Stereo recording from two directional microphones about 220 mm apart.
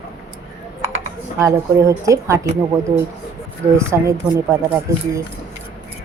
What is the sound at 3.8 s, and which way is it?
Speech, 10° right (ahead or behind).